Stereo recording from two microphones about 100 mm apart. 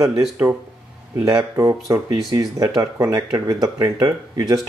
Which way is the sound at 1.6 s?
30° right (ahead or behind).